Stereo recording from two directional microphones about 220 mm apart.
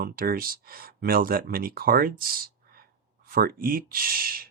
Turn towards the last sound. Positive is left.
turn(degrees=-40)  # may be behind; listen again after turning